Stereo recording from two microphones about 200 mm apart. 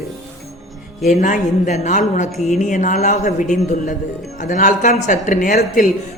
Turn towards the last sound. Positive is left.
turn(degrees=40)  # may be behind; listen again after turning